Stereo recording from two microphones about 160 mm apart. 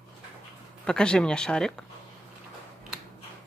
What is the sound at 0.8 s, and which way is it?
Speech, 5° left (ahead or behind).